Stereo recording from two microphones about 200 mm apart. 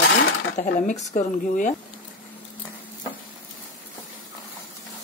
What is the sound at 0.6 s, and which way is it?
Speech, 40° left (ahead or behind).